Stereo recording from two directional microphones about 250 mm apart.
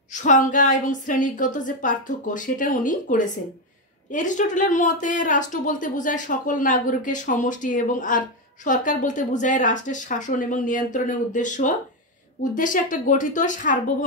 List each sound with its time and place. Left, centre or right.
0.1 s speech: left